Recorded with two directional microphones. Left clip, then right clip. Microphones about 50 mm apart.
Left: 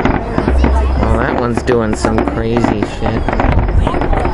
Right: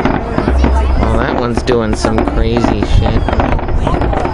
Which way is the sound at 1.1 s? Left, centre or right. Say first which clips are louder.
Even; left.